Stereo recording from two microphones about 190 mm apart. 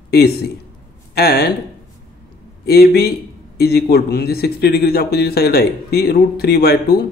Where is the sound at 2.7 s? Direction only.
55° left (ahead or behind).